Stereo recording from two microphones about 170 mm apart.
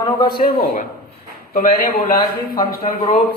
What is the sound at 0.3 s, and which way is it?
A man's voice, 60° left (ahead or behind).